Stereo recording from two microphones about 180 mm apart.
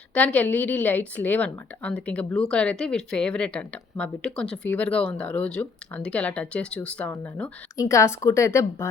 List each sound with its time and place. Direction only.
0.1 s a woman's voice: 10° left (ahead or behind)